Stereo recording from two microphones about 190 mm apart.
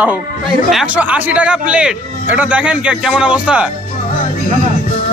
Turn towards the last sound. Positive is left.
turn(degrees=-5)  # may be behind; listen again after turning